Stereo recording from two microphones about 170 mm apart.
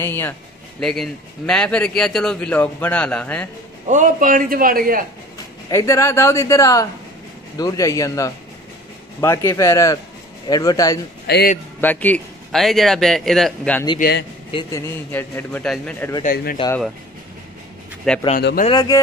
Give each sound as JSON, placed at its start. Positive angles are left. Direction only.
{"t": 0.0, "sound": "a man's voice", "side_deg": 15}
{"t": 3.8, "sound": "a man's voice", "side_deg": -45}
{"t": 5.7, "sound": "a man's voice", "side_deg": 20}
{"t": 11.2, "sound": "a man's voice", "side_deg": 75}
{"t": 11.8, "sound": "a man's voice", "side_deg": 10}
{"t": 13.9, "sound": "a man's voice", "side_deg": 65}
{"t": 14.7, "sound": "a man's voice", "side_deg": 15}
{"t": 16.2, "sound": "speech", "side_deg": 55}
{"t": 18.1, "sound": "a man's voice", "side_deg": 0}
{"t": 18.4, "sound": "speech", "side_deg": 60}
{"t": 18.7, "sound": "a man's voice", "side_deg": 25}